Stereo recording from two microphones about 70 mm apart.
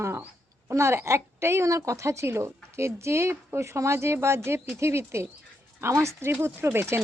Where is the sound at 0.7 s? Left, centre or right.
Right.